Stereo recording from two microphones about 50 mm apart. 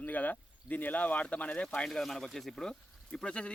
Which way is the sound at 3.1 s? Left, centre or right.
Left.